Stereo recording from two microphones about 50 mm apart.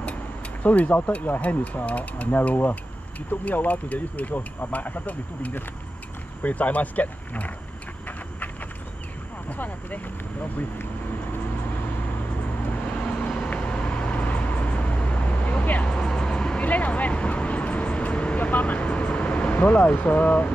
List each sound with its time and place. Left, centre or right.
0.7 s speech: left
9.5 s speech: left
13.5 s vehicle: left
15.9 s vehicle: centre
16.6 s vehicle: left